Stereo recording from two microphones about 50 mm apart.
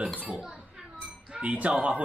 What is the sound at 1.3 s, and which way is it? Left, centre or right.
Speech, right.